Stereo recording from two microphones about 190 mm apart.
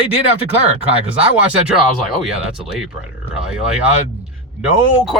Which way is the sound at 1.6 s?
5° right (ahead or behind).